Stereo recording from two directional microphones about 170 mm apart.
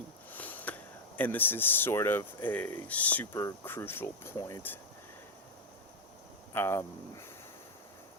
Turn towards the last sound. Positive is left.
turn(degrees=15)  # may be behind; listen again after turning